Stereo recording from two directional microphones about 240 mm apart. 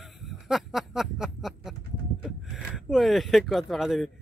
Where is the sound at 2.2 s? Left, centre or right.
Centre.